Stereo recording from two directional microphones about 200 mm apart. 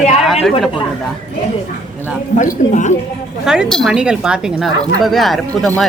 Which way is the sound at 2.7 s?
40° left (ahead or behind).